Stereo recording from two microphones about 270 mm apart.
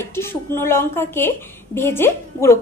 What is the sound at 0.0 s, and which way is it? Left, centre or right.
A woman's voice, centre.